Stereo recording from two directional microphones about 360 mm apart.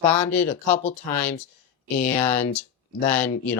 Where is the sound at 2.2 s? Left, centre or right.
Centre.